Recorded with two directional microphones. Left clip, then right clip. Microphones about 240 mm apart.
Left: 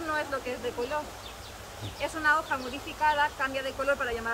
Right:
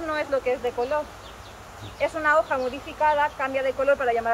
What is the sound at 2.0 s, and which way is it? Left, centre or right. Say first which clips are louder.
Speech: right 5 dB; left.